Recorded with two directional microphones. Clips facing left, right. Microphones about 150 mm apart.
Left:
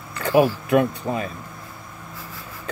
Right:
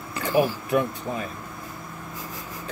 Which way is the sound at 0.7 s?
75° left (ahead or behind).